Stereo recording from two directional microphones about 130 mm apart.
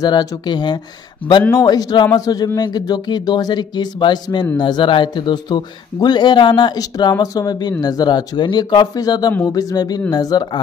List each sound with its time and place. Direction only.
0.0 s speech: 30° left (ahead or behind)